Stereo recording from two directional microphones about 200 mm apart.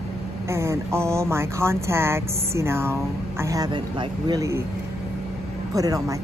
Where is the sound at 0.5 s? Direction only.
15° right (ahead or behind).